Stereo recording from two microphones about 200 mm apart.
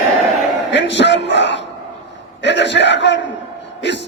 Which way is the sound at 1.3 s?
60° left (ahead or behind).